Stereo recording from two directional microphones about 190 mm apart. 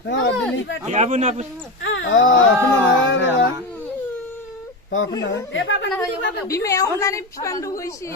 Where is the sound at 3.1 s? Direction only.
80° left.